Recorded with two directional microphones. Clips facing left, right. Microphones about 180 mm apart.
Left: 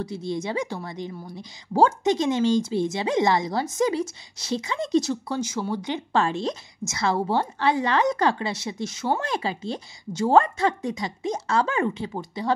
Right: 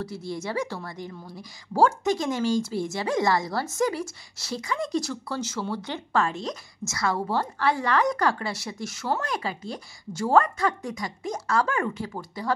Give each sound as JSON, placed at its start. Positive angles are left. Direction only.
{"t": 0.0, "sound": "a woman's voice", "side_deg": 20}
{"t": 6.2, "sound": "a woman's voice", "side_deg": 30}